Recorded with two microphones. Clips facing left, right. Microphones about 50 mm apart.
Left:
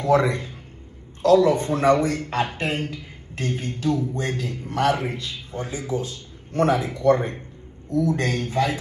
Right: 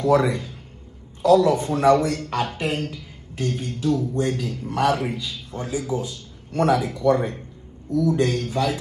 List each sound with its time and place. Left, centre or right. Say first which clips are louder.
0.0 s speech: right 1 dB; left
0.3 s a man's voice: even; left
6.6 s a man's voice: even; left